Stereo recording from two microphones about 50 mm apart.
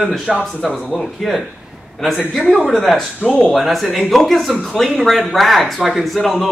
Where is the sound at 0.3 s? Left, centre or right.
Centre.